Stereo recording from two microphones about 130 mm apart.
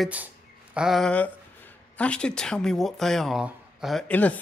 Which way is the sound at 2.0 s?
5° left (ahead or behind).